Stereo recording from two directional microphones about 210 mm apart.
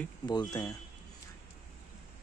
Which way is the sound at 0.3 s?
20° left (ahead or behind).